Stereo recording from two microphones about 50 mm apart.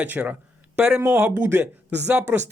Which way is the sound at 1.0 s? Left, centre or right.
Right.